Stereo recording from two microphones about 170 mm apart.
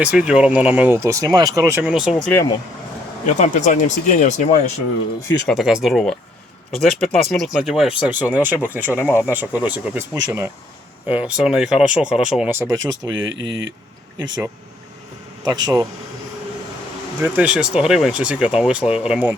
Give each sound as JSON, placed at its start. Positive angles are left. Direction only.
{"t": 0.0, "sound": "speech", "side_deg": -5}
{"t": 1.9, "sound": "speech", "side_deg": -5}
{"t": 3.3, "sound": "speech", "side_deg": 45}
{"t": 5.5, "sound": "speech", "side_deg": 0}
{"t": 12.5, "sound": "speech", "side_deg": -20}
{"t": 13.1, "sound": "speech", "side_deg": -90}
{"t": 15.4, "sound": "speech", "side_deg": -25}
{"t": 17.2, "sound": "speech", "side_deg": -10}